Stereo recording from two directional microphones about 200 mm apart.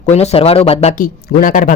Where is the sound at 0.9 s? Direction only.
45° left (ahead or behind).